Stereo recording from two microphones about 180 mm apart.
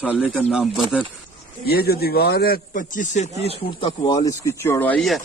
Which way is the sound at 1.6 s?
60° left (ahead or behind).